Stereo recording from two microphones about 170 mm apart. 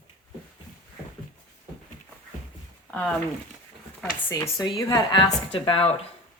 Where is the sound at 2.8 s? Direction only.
10° left (ahead or behind).